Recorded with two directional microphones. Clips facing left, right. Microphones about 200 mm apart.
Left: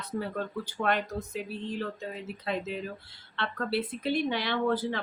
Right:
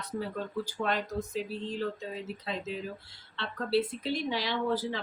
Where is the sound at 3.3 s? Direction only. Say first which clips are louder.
Right 2 dB; 60° left (ahead or behind).